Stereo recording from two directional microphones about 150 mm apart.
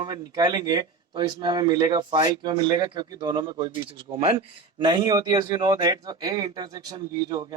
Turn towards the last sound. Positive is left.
turn(degrees=-25)  # may be behind; listen again after turning